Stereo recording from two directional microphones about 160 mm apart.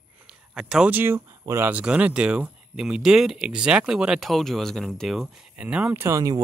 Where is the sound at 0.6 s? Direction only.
5° right (ahead or behind).